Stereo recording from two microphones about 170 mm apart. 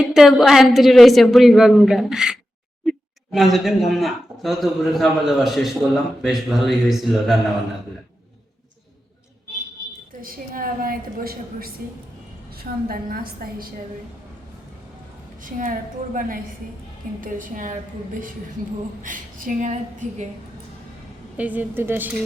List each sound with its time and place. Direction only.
0.0 s a man's voice: 5° right (ahead or behind)
10.2 s a woman's voice: 55° right (ahead or behind)
12.9 s a woman's voice: 60° right (ahead or behind)
15.4 s a woman's voice: 50° right (ahead or behind)
19.0 s a woman's voice: 50° right (ahead or behind)
21.3 s speech: 10° right (ahead or behind)